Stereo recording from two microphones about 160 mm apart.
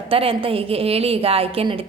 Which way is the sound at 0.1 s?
35° right (ahead or behind).